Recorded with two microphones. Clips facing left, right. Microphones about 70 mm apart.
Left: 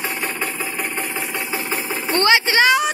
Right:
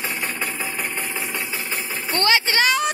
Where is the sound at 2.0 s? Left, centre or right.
Left.